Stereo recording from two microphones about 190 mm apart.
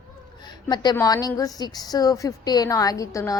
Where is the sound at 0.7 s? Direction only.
20° left (ahead or behind).